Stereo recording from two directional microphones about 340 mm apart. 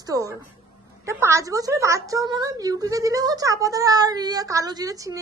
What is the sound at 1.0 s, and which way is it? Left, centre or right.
A woman's voice, centre.